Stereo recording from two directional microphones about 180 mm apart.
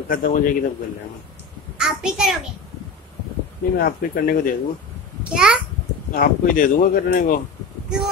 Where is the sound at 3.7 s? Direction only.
55° left (ahead or behind).